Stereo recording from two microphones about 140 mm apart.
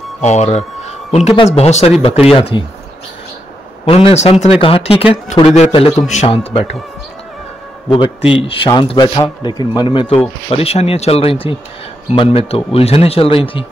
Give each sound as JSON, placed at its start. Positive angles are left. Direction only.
{"t": 0.2, "sound": "speech", "side_deg": 55}
{"t": 1.3, "sound": "a man's voice", "side_deg": 40}
{"t": 3.8, "sound": "speech", "side_deg": 45}
{"t": 4.6, "sound": "a man's voice", "side_deg": 40}
{"t": 6.3, "sound": "speech", "side_deg": 45}
{"t": 7.9, "sound": "a man's voice", "side_deg": 40}